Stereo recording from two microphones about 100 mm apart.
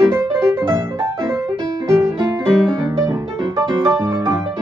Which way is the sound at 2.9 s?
25° right (ahead or behind).